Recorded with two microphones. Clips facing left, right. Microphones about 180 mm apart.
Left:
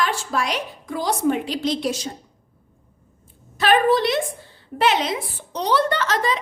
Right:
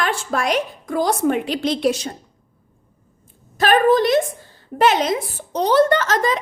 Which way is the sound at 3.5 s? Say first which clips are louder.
Right 3 dB; 45° right (ahead or behind).